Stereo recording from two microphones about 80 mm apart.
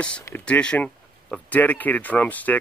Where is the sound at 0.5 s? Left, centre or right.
Centre.